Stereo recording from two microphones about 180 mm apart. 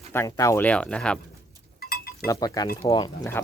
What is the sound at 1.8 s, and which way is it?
Sheep, 55° left (ahead or behind).